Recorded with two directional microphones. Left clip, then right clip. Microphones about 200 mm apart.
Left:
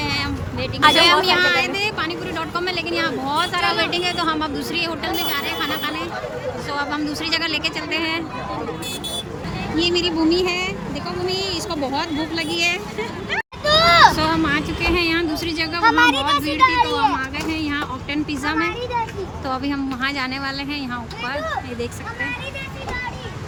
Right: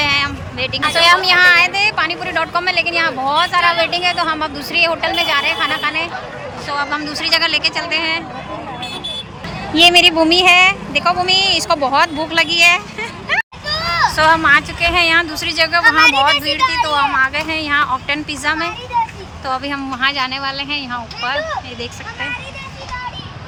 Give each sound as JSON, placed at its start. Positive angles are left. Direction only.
{"t": 0.0, "sound": "a sound", "side_deg": 0}
{"t": 0.9, "sound": "speech", "side_deg": 5}
{"t": 9.7, "sound": "a woman's voice", "side_deg": -10}
{"t": 13.7, "sound": "vehicle", "side_deg": 30}
{"t": 14.2, "sound": "speech", "side_deg": 0}
{"t": 16.6, "sound": "speech", "side_deg": 40}
{"t": 16.8, "sound": "speech", "side_deg": 5}
{"t": 18.9, "sound": "vehicle", "side_deg": 25}
{"t": 19.5, "sound": "speech", "side_deg": 5}